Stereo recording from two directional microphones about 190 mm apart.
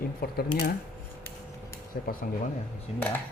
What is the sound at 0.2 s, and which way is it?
Speech, 55° left (ahead or behind).